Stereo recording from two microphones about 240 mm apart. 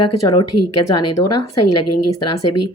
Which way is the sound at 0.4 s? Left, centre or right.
Left.